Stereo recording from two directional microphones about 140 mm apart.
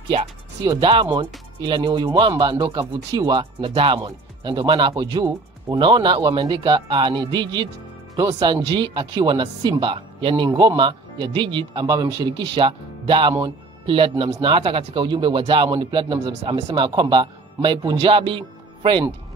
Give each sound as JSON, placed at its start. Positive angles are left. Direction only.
{"t": 0.7, "sound": "speech", "side_deg": -35}
{"t": 3.3, "sound": "speech", "side_deg": -40}